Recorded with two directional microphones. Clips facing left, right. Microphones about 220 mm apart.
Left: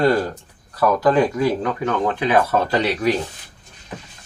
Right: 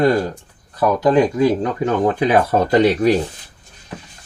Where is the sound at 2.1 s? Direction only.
40° right (ahead or behind).